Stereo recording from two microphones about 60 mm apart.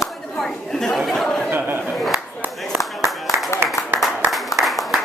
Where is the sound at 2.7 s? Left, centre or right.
Centre.